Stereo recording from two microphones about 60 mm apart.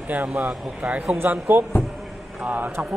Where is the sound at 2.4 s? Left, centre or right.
Right.